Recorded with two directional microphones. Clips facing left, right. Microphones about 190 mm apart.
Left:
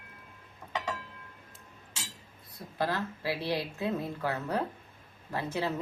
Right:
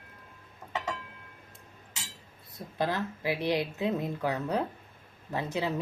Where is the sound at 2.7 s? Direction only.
20° right (ahead or behind).